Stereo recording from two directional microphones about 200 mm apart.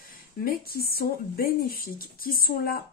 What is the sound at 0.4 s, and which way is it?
Speech, 50° left (ahead or behind).